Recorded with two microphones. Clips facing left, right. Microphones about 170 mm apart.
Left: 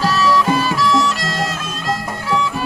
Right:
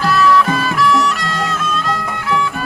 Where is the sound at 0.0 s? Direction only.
35° left (ahead or behind).